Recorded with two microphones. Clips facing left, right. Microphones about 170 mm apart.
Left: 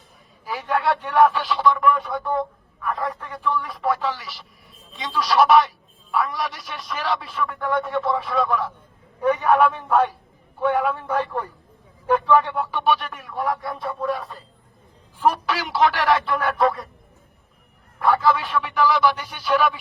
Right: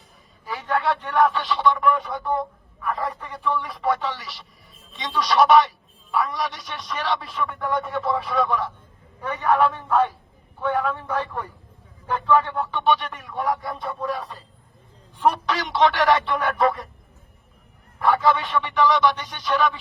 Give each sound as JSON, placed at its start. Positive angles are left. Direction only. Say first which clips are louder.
{"t": 0.4, "sound": "a man's voice", "louder": "left 1 dB", "side_deg": 0}
{"t": 9.5, "sound": "a man's voice", "louder": "right 1 dB", "side_deg": 70}
{"t": 11.0, "sound": "a man's voice", "louder": "left 3 dB", "side_deg": 15}
{"t": 12.3, "sound": "speech", "louder": "right 3 dB", "side_deg": 0}
{"t": 18.0, "sound": "speech", "louder": "even", "side_deg": 0}